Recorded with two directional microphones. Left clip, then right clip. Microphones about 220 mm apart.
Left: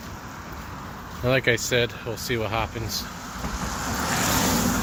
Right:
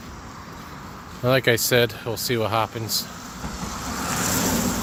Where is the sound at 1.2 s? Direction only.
25° right (ahead or behind).